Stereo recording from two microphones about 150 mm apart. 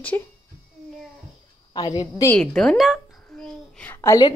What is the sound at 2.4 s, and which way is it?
A child's voice, 5° left (ahead or behind).